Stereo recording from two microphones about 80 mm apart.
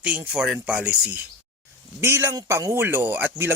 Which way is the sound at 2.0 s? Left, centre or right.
Right.